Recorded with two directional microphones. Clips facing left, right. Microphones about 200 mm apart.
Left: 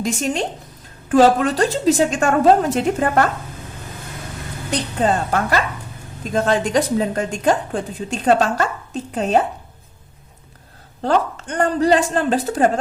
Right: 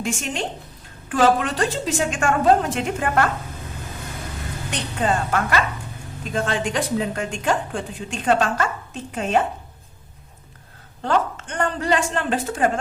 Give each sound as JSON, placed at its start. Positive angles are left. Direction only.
{"t": 0.0, "sound": "a woman's voice", "side_deg": 40}
{"t": 4.7, "sound": "a woman's voice", "side_deg": 35}
{"t": 11.0, "sound": "a woman's voice", "side_deg": 35}